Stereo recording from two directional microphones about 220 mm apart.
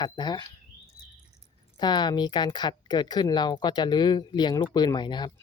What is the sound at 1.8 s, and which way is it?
Speech, 20° left (ahead or behind).